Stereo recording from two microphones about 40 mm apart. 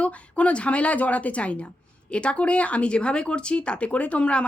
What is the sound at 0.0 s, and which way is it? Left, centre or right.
A woman's voice, left.